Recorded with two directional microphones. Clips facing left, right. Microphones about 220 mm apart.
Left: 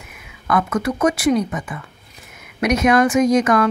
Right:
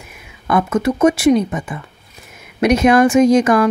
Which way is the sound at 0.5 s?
25° right (ahead or behind).